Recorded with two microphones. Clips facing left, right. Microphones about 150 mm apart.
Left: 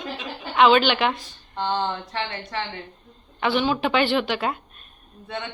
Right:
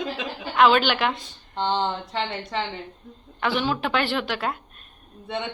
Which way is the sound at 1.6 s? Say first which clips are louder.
Right 1 dB; 20° right (ahead or behind).